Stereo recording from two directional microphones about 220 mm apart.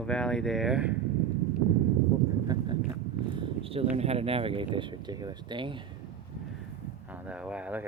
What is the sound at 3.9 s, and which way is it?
Speech, 25° right (ahead or behind).